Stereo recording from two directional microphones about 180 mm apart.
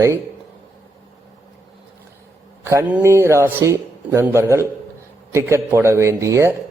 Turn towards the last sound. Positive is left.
turn(degrees=-15)  # may be behind; listen again after turning